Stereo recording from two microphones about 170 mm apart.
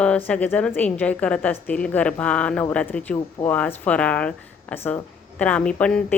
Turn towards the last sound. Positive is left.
turn(degrees=5)  # may be behind; listen again after turning